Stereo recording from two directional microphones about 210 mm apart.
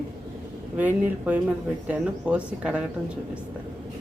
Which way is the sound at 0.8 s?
5° right (ahead or behind).